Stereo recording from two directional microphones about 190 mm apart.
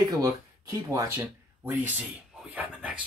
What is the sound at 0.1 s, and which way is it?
Speech, 20° right (ahead or behind).